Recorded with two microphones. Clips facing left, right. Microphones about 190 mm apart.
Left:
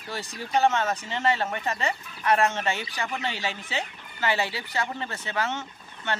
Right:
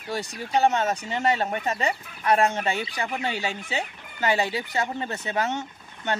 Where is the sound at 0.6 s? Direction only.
15° right (ahead or behind).